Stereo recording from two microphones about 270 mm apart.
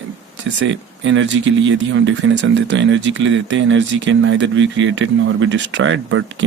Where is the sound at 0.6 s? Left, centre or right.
Right.